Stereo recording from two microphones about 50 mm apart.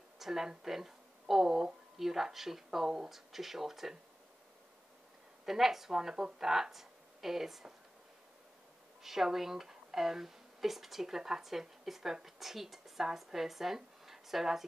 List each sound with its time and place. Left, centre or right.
0.2 s speech: centre
5.4 s speech: centre
9.0 s speech: centre